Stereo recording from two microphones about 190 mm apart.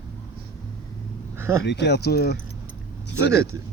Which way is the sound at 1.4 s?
15° right (ahead or behind).